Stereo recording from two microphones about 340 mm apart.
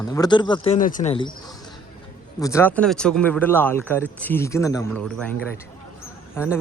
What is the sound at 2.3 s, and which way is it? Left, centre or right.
Speech, centre.